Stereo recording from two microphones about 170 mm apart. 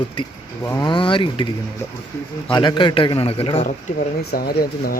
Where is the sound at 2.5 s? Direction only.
25° left (ahead or behind).